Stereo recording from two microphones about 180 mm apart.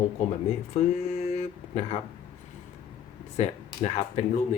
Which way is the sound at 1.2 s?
35° left (ahead or behind).